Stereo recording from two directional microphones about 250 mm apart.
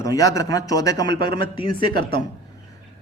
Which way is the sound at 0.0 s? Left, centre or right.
Centre.